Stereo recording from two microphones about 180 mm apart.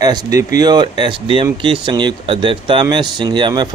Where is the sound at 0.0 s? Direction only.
20° right (ahead or behind).